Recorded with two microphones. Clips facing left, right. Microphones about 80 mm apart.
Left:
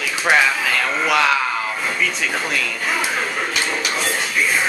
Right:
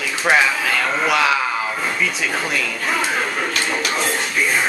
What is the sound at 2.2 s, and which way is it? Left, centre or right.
Speech, centre.